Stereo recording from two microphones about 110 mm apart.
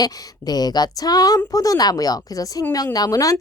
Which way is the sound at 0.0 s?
35° left (ahead or behind).